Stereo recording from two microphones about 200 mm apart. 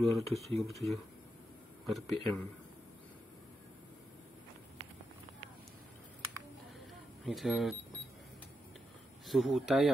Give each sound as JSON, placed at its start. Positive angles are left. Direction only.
{"t": 0.0, "sound": "speech", "side_deg": 0}
{"t": 7.2, "sound": "speech", "side_deg": 0}
{"t": 9.3, "sound": "speech", "side_deg": 0}